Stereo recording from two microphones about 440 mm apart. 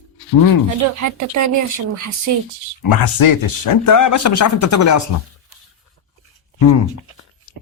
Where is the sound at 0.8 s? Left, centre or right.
Right.